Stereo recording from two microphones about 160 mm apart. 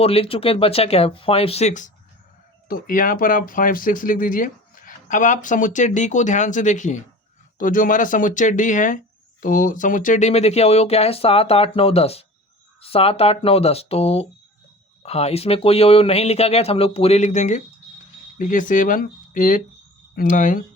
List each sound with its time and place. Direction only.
0.0 s speech: 35° left (ahead or behind)
2.6 s speech: 60° left (ahead or behind)